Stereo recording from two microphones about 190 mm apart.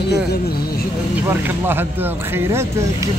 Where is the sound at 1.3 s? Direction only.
10° right (ahead or behind).